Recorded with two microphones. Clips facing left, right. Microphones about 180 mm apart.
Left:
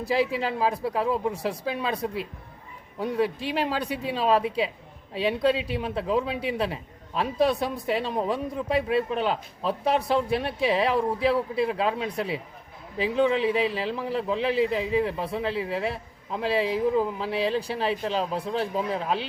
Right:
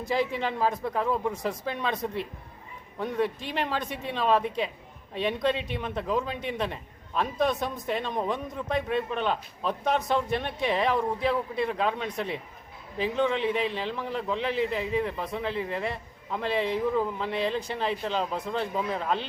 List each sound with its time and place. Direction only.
0.1 s speech: 5° left (ahead or behind)
3.0 s speech: 5° left (ahead or behind)
15.1 s speech: 30° left (ahead or behind)
15.4 s speech: 5° left (ahead or behind)